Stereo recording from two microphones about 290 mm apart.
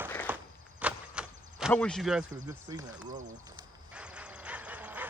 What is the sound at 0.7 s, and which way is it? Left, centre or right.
Door, centre.